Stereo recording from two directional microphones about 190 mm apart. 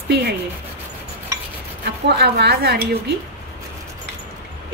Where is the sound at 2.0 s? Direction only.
60° right (ahead or behind).